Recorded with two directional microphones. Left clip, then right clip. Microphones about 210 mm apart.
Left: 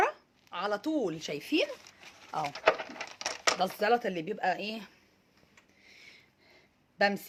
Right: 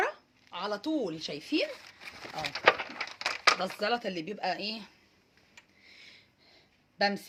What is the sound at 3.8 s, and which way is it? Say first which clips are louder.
A woman's voice: left 3 dB; 10° left (ahead or behind).